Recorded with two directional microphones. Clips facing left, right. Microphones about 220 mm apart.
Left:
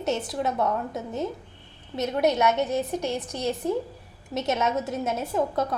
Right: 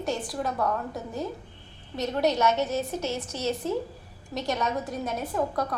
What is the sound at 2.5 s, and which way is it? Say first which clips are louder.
A woman's voice: left 2 dB; 15° left (ahead or behind).